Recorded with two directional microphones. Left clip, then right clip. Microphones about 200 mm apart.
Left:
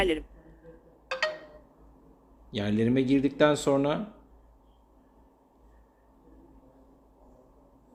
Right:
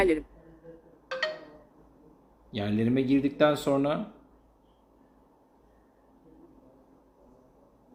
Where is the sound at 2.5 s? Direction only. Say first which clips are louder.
Left 1 dB; 30° left (ahead or behind).